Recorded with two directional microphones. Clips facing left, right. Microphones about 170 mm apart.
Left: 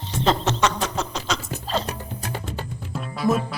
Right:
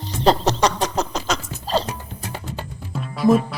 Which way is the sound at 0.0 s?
35° right (ahead or behind).